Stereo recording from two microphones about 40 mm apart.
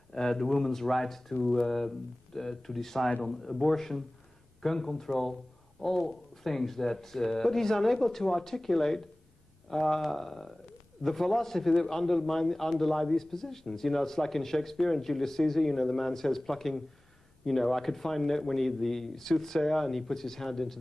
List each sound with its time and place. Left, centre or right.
0.1 s a man's voice: centre